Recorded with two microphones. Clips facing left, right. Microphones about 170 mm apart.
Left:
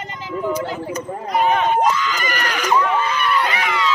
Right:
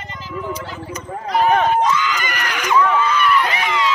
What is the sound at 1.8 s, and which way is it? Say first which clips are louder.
Speech: even; 40° left (ahead or behind).